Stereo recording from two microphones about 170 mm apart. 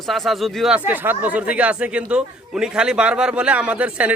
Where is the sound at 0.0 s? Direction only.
Centre (ahead or behind).